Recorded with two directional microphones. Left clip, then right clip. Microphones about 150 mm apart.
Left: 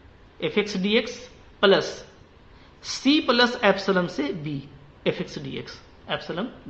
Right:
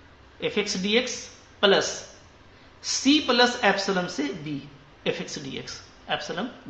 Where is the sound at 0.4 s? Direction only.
35° left (ahead or behind).